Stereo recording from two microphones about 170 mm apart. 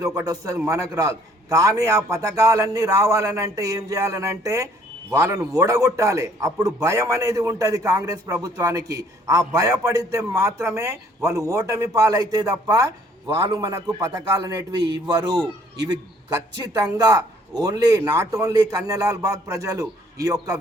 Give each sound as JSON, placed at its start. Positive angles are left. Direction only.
{"t": 0.0, "sound": "a man's voice", "side_deg": -20}